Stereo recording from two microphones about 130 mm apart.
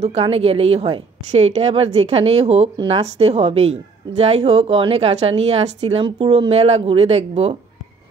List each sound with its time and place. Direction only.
0.0 s a woman's voice: 50° right (ahead or behind)